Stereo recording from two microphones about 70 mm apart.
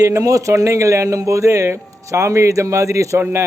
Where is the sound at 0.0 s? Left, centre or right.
Right.